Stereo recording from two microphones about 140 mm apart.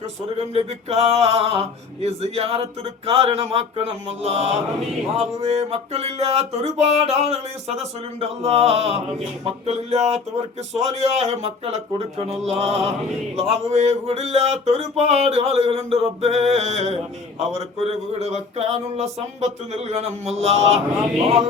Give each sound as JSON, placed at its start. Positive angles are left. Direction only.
{"t": 0.3, "sound": "music", "side_deg": -50}